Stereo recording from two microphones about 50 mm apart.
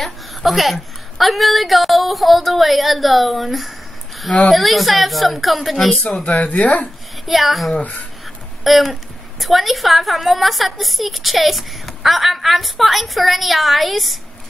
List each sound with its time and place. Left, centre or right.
0.0 s a woman's voice: centre
6.2 s speech: centre
7.2 s a woman's voice: centre
8.6 s a sound: centre
9.4 s a woman's voice: centre